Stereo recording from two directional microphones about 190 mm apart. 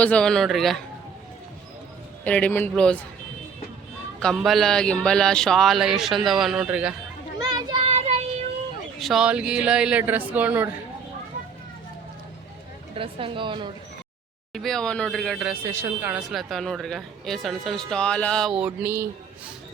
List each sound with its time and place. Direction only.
0.0 s speech: 5° left (ahead or behind)
2.2 s a man's voice: 5° left (ahead or behind)
4.2 s speech: centre (ahead or behind)
7.3 s child singing: 20° right (ahead or behind)
9.0 s speech: centre (ahead or behind)
13.0 s a woman's voice: 30° right (ahead or behind)
14.5 s speech: centre (ahead or behind)